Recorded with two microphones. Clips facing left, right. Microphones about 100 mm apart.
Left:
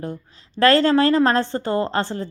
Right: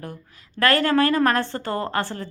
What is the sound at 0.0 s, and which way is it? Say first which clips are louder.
A woman's voice: left 6 dB; 20° left (ahead or behind).